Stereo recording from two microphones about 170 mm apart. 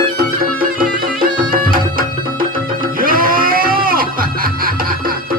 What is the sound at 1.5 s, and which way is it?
Music, 55° right (ahead or behind).